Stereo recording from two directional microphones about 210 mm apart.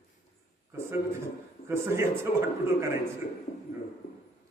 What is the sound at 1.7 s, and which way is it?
Speech, 10° right (ahead or behind).